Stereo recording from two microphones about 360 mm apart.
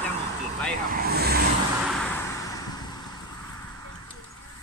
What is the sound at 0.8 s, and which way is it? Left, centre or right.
Speech, right.